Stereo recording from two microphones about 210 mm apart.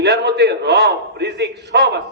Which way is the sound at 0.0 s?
50° right (ahead or behind).